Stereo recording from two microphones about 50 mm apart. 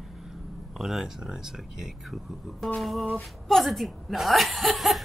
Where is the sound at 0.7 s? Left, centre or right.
Centre.